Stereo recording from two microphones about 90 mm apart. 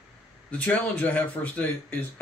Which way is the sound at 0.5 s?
15° left (ahead or behind).